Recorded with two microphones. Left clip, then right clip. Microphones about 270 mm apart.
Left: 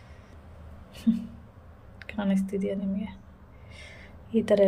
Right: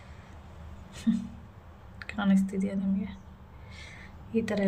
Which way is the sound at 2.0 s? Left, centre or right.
Centre.